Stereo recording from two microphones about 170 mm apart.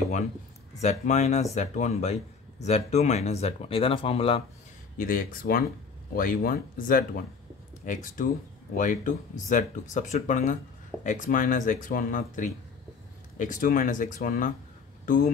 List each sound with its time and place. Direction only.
0.7 s speech: 40° left (ahead or behind)
4.9 s speech: 55° left (ahead or behind)